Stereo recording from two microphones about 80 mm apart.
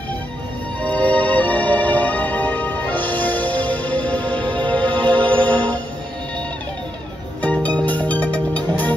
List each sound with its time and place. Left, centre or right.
0.8 s music: centre
7.4 s music: centre